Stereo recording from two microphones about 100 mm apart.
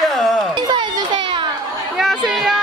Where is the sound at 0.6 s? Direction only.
50° right (ahead or behind).